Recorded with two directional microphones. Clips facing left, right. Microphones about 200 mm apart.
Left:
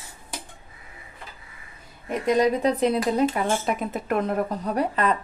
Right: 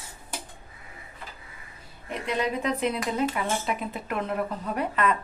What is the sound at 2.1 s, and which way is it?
Speech, 40° left (ahead or behind).